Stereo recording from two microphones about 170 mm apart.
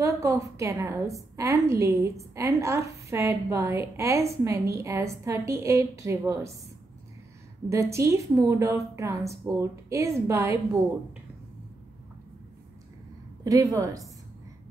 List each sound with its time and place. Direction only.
0.0 s a woman's voice: 20° right (ahead or behind)
7.7 s a woman's voice: 15° right (ahead or behind)
13.4 s a woman's voice: 20° right (ahead or behind)